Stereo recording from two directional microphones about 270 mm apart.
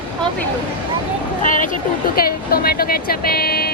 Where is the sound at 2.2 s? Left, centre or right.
Left.